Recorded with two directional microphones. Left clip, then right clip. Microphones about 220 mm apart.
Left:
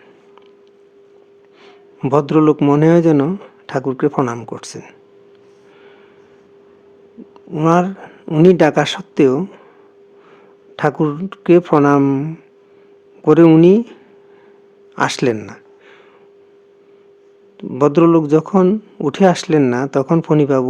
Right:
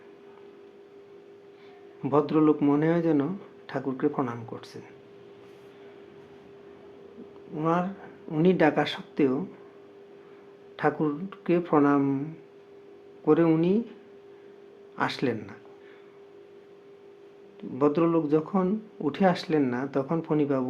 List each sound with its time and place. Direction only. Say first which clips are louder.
1.6 s speech: left 12 dB; 50° left (ahead or behind)
7.5 s speech: left 13 dB; 50° left (ahead or behind)
10.8 s speech: left 9 dB; 50° left (ahead or behind)
17.6 s speech: left 12 dB; 50° left (ahead or behind)